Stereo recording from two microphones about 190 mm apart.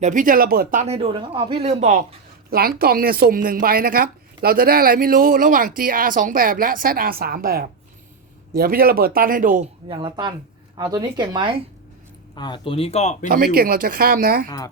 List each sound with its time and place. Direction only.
0.0 s speech: 45° right (ahead or behind)
2.5 s a woman's voice: 50° right (ahead or behind)
9.9 s speech: 25° right (ahead or behind)
12.3 s speech: 25° left (ahead or behind)
13.3 s a woman's voice: 50° right (ahead or behind)